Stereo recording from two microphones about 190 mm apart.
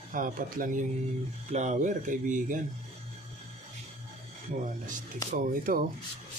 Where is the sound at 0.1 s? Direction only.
45° right (ahead or behind).